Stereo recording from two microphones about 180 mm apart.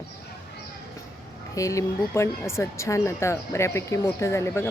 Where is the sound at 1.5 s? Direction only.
15° left (ahead or behind).